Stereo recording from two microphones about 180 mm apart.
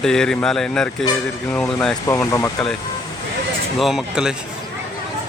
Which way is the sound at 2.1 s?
15° left (ahead or behind).